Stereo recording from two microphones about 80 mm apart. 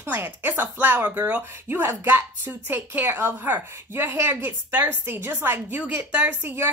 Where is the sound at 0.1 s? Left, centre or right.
Right.